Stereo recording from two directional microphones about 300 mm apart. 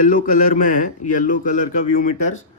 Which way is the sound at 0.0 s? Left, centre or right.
Left.